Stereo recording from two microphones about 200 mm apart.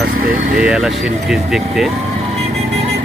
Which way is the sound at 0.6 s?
5° right (ahead or behind).